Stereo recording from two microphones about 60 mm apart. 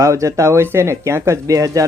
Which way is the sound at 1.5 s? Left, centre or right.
Right.